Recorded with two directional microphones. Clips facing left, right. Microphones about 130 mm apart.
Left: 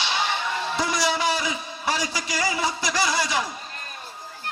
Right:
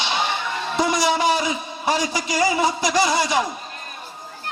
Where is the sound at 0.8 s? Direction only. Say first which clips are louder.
Right 6 dB; 20° right (ahead or behind).